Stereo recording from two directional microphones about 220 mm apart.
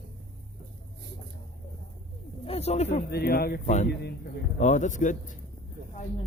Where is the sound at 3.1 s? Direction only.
45° left (ahead or behind).